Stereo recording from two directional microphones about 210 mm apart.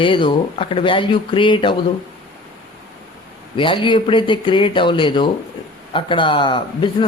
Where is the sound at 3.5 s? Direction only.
25° left (ahead or behind).